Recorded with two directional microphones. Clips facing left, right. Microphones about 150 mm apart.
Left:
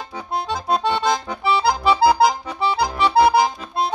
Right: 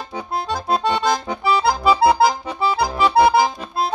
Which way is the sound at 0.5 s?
Centre (ahead or behind).